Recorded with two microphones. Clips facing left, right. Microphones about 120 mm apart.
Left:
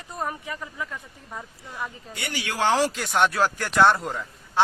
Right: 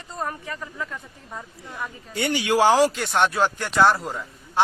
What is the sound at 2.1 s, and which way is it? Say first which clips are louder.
Speech: right 11 dB; 25° right (ahead or behind).